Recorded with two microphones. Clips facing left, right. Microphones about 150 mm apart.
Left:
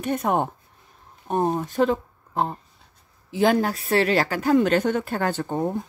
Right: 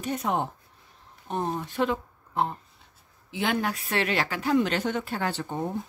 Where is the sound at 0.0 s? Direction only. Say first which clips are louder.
Left 5 dB; 50° left (ahead or behind).